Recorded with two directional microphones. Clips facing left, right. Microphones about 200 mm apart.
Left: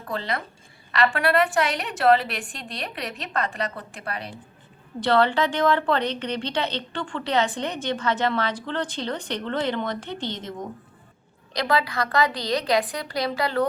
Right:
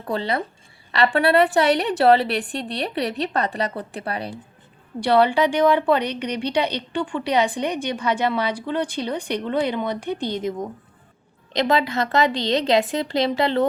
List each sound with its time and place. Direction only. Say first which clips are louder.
0.1 s a woman's voice: right 5 dB; 30° right (ahead or behind)
4.9 s a woman's voice: right 3 dB; 10° right (ahead or behind)
11.5 s a woman's voice: right 4 dB; 25° right (ahead or behind)